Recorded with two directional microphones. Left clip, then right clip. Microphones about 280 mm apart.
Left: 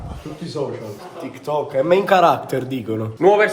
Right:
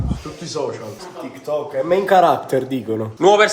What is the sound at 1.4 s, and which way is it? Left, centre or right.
A man's voice, centre.